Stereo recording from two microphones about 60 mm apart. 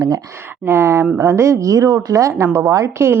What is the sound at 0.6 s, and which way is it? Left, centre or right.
A woman's voice, right.